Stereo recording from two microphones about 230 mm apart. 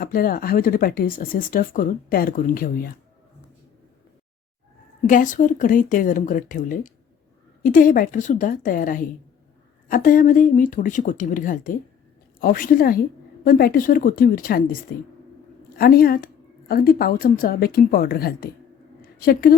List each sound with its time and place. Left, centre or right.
0.0 s speech: left
5.0 s speech: left
15.8 s speech: left